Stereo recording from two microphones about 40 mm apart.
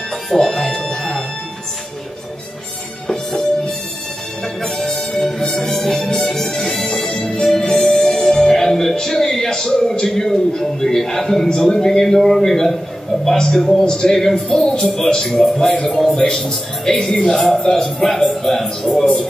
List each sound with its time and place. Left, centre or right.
0.3 s music: centre
3.1 s music: centre
10.2 s a man's voice: centre